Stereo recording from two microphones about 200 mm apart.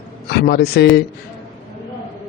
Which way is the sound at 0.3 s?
55° left (ahead or behind).